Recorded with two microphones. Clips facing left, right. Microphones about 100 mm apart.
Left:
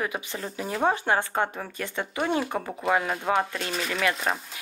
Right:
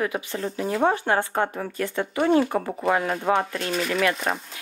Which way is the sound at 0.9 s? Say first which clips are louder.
Even; 15° left (ahead or behind).